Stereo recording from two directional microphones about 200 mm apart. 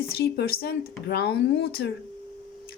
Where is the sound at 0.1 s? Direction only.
50° left (ahead or behind).